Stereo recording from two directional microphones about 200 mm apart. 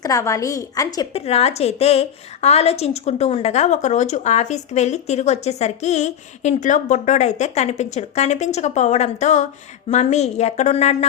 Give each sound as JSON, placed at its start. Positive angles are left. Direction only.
{"t": 0.0, "sound": "a woman's voice", "side_deg": 15}
{"t": 1.2, "sound": "a woman's voice", "side_deg": 30}